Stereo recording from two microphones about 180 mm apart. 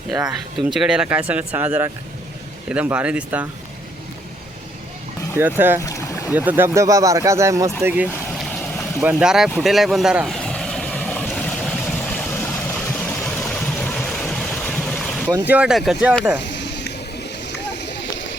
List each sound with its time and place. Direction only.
0.7 s speech: 5° right (ahead or behind)
5.4 s speech: 10° right (ahead or behind)
5.8 s boat: 15° left (ahead or behind)
6.3 s speech: 10° right (ahead or behind)
9.0 s vehicle: 5° right (ahead or behind)
15.3 s speech: 10° right (ahead or behind)
16.4 s a sound: 75° left (ahead or behind)
17.2 s boat: 70° left (ahead or behind)